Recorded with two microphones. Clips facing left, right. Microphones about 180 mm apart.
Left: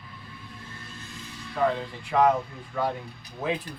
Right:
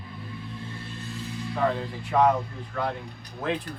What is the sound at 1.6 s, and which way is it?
Speech, centre (ahead or behind).